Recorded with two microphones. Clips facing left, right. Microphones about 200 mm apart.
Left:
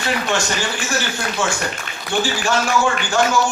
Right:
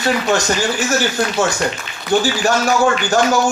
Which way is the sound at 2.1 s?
40° right (ahead or behind).